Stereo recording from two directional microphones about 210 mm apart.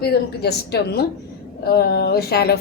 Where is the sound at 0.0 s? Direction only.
50° left (ahead or behind).